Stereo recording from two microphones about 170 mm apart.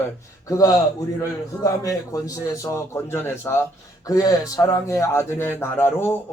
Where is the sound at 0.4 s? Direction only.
20° left (ahead or behind).